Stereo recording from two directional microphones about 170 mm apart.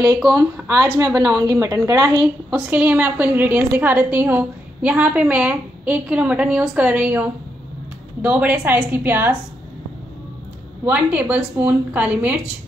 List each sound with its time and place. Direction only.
0.3 s a woman's voice: 20° right (ahead or behind)
2.5 s a woman's voice: 10° right (ahead or behind)
10.9 s a woman's voice: 10° right (ahead or behind)